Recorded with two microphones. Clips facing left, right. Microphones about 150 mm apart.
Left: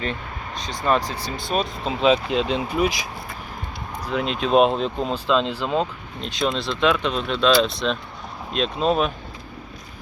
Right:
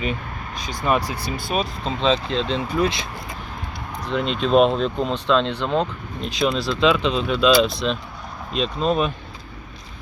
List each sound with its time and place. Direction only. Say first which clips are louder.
0.9 s speech: even; 10° right (ahead or behind)
1.8 s speech: left 4 dB; 5° left (ahead or behind)
4.0 s speech: right 1 dB; 5° left (ahead or behind)